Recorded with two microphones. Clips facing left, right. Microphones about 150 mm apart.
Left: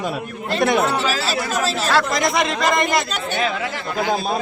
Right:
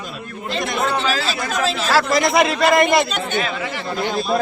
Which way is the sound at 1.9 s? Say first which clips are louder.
Right 4 dB; 5° right (ahead or behind).